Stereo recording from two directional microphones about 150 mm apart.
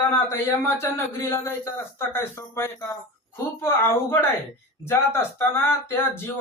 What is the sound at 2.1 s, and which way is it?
Speech, 15° left (ahead or behind).